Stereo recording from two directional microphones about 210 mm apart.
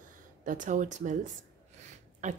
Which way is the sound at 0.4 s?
40° right (ahead or behind).